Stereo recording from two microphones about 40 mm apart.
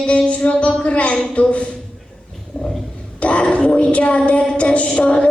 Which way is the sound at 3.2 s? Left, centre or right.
Left.